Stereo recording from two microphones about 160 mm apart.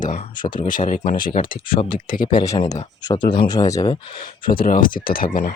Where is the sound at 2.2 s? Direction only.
25° left (ahead or behind).